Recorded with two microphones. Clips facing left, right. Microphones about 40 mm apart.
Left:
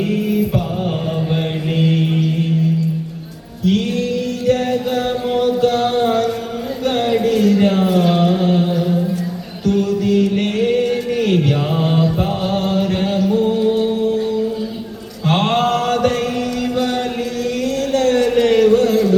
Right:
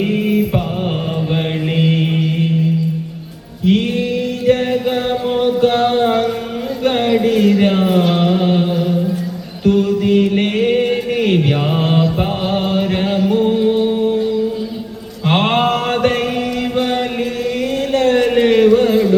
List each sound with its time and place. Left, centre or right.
0.0 s mantra: right
3.7 s music: right
6.8 s a sound: right
7.3 s music: right
11.3 s mantra: right
15.3 s mantra: right
16.7 s chant: right
17.9 s a sound: centre